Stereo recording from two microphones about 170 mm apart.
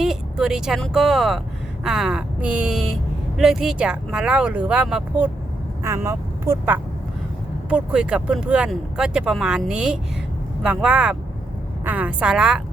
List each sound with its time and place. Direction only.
0.0 s speech: 5° right (ahead or behind)